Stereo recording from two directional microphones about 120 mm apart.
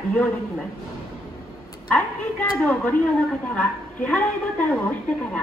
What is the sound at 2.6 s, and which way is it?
A woman's voice, 10° left (ahead or behind).